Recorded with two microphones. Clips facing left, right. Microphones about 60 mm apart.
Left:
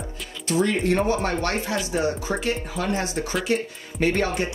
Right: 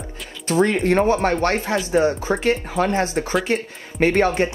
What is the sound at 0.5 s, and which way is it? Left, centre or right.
Speech, right.